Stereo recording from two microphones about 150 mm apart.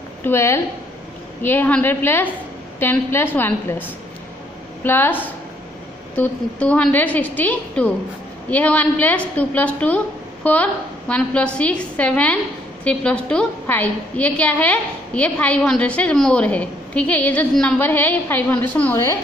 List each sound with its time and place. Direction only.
0.2 s a woman's voice: 15° left (ahead or behind)